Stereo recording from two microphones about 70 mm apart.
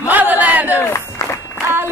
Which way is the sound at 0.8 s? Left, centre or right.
Left.